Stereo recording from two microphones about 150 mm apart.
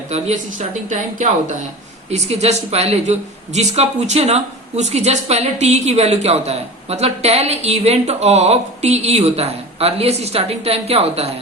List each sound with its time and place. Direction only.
0.1 s speech: 45° right (ahead or behind)